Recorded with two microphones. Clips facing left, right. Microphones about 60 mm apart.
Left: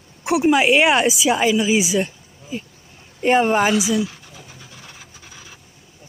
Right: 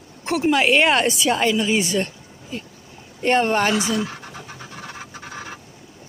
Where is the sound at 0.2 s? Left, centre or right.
Centre.